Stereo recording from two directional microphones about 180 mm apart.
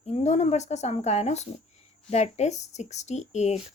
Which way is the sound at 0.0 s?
40° left (ahead or behind).